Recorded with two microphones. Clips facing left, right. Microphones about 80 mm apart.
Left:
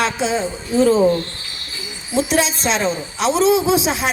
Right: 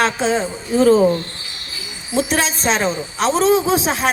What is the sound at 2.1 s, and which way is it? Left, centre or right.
A woman's voice, right.